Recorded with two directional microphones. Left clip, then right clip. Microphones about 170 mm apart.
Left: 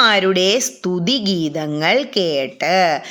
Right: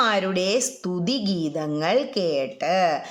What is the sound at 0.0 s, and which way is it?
A woman's voice, 15° left (ahead or behind).